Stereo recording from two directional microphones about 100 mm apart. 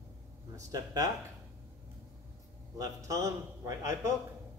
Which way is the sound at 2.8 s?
35° right (ahead or behind).